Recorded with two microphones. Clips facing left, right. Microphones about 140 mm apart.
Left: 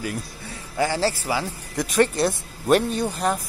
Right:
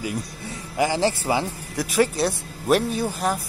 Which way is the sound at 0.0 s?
15° right (ahead or behind).